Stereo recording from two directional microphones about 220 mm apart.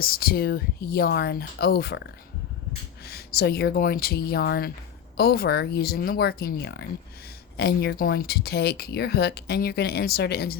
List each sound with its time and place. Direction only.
0.0 s speech: 45° left (ahead or behind)